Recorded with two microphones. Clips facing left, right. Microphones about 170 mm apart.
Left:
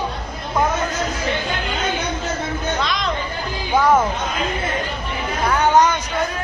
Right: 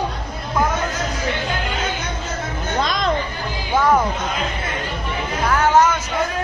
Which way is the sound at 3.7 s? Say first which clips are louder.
Left 1 dB; centre (ahead or behind).